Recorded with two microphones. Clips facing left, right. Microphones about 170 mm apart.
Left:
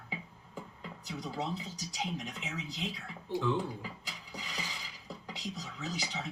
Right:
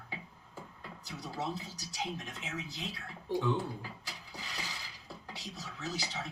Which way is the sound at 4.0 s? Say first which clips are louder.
Left 1 dB; 15° left (ahead or behind).